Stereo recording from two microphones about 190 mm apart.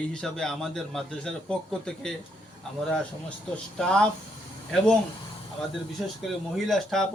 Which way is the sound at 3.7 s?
5° left (ahead or behind).